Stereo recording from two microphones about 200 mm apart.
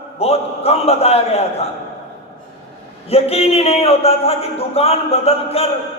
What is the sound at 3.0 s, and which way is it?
A man's voice, 30° left (ahead or behind).